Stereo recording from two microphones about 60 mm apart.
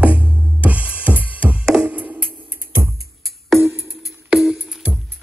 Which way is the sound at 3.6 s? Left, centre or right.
Right.